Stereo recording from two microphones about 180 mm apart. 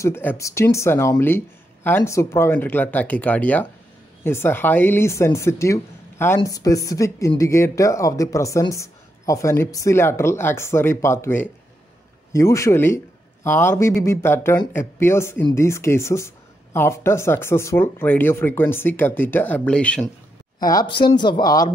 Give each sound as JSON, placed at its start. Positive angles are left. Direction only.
{"t": 0.0, "sound": "speech", "side_deg": 10}
{"t": 20.5, "sound": "a woman's voice", "side_deg": 25}